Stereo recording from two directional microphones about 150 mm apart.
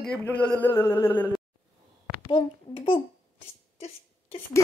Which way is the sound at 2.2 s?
35° left (ahead or behind).